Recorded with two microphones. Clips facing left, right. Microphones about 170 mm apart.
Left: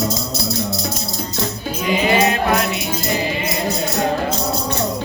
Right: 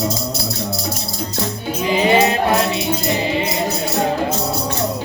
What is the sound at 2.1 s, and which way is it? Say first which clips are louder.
Music: right 2 dB; 25° right (ahead or behind).